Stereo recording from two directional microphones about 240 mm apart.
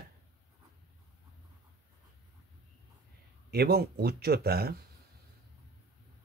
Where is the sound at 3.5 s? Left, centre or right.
Right.